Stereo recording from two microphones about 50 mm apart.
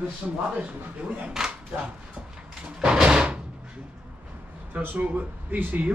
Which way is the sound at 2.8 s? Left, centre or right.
Centre.